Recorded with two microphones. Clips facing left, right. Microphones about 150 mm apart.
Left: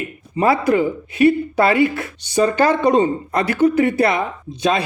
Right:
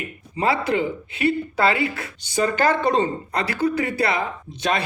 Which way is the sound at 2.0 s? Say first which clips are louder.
Left 5 dB; 25° left (ahead or behind).